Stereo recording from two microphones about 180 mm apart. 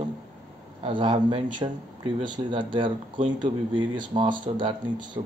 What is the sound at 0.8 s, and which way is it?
Speech, 30° right (ahead or behind).